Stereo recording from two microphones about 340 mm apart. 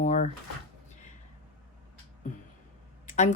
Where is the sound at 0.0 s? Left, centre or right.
Left.